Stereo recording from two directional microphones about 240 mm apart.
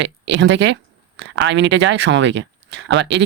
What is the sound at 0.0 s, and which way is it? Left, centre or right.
Speech, right.